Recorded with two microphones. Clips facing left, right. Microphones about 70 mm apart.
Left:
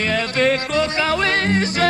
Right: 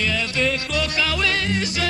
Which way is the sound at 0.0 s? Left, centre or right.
Left.